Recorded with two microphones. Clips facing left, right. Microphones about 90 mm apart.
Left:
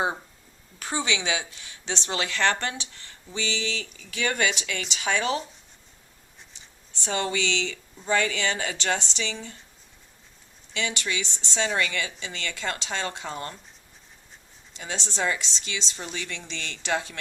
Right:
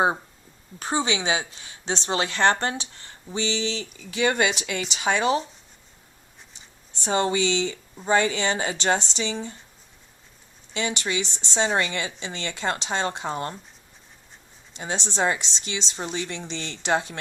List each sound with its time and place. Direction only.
0.8 s a woman's voice: 30° right (ahead or behind)
7.0 s a woman's voice: 25° right (ahead or behind)
10.8 s a woman's voice: 30° right (ahead or behind)
14.8 s a woman's voice: 30° right (ahead or behind)